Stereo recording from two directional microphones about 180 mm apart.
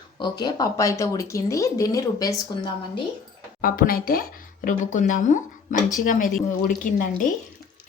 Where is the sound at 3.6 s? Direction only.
55° left (ahead or behind).